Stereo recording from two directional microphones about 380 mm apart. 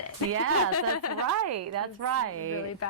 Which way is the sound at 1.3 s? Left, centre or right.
Right.